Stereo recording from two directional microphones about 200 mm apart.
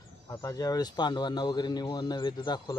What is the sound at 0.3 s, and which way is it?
Speech, 20° left (ahead or behind).